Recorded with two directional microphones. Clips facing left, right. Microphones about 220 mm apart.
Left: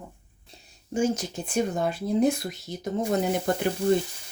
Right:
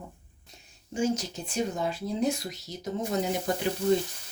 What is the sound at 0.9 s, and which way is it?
Speech, 55° left (ahead or behind).